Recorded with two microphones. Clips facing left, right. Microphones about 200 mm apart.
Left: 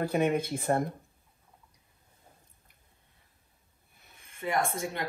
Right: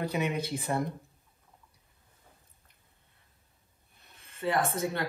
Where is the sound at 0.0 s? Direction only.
50° left (ahead or behind).